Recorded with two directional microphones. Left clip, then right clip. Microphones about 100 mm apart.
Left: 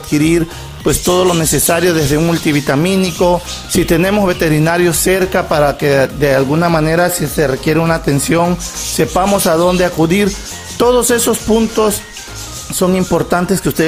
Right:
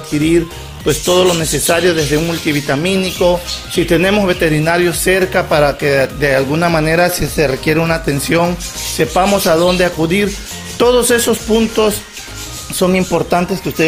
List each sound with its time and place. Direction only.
0.1 s speech: 70° left (ahead or behind)
0.8 s speech: 60° left (ahead or behind)
1.9 s speech: 70° left (ahead or behind); by 11.3 s 45° left (ahead or behind)
11.7 s speech: 25° left (ahead or behind)
13.1 s speech: 50° left (ahead or behind)